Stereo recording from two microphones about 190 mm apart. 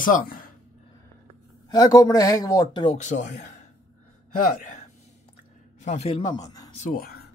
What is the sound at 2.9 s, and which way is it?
Speech, 40° left (ahead or behind).